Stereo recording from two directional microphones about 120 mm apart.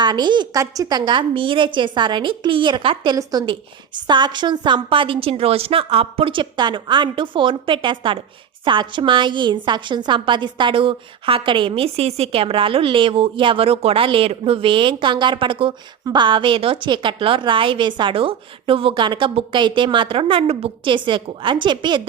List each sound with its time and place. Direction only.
0.0 s a woman's voice: 40° right (ahead or behind)